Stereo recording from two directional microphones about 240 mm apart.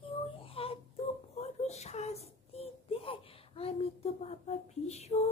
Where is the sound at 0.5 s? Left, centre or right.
Left.